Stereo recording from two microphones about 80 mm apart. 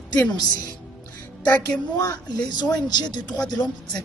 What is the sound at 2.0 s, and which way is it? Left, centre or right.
Speech, left.